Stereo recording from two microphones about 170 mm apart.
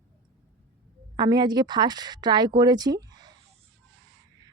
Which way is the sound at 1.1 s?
25° right (ahead or behind).